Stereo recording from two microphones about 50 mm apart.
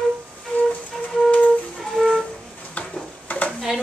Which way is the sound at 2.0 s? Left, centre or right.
Centre.